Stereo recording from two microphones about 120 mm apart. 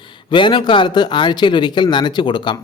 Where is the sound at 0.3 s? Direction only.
40° left (ahead or behind).